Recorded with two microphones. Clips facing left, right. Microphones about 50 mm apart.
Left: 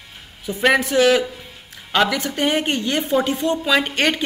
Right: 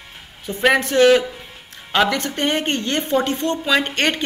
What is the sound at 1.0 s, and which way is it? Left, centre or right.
A woman's voice, centre.